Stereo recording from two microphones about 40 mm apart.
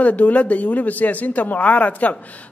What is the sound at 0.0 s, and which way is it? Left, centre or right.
A man's voice, left.